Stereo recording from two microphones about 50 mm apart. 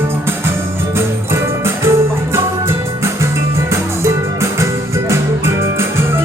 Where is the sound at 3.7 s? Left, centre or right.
Right.